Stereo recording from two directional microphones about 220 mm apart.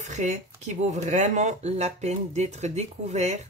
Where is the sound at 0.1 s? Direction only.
30° right (ahead or behind).